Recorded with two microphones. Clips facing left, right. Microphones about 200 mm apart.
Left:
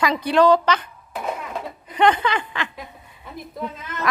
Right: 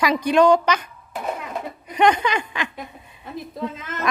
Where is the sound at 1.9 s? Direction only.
15° right (ahead or behind).